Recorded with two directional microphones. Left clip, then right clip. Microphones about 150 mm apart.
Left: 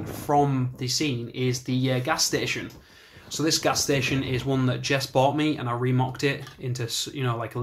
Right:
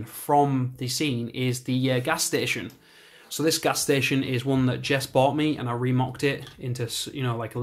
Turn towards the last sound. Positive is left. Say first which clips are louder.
# left 1 dB
turn(degrees=-15)  # may be behind; listen again after turning